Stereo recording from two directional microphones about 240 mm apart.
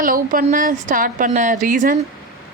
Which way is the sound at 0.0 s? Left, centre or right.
Right.